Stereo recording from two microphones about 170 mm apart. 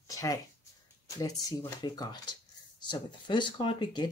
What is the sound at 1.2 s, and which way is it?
Speech, 20° left (ahead or behind).